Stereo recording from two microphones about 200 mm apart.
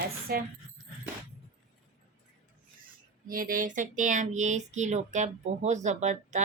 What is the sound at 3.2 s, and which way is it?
Speech, 45° right (ahead or behind).